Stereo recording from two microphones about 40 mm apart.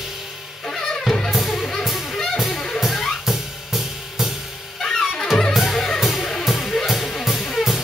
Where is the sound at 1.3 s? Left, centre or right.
Centre.